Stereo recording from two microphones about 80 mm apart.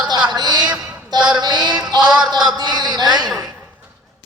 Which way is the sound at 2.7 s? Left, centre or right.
Right.